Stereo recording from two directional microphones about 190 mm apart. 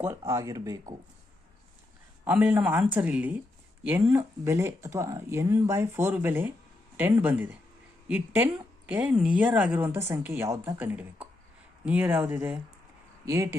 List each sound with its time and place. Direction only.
0.0 s speech: 15° right (ahead or behind)
2.2 s speech: 5° right (ahead or behind)